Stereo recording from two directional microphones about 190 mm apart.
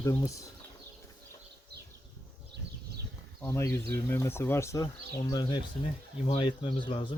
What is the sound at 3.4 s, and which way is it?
Speech, 15° left (ahead or behind).